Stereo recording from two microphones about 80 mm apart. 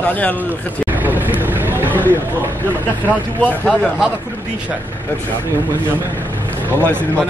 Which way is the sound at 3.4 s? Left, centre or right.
Left.